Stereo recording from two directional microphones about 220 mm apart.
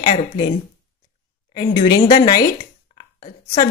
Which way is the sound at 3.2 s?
30° left (ahead or behind).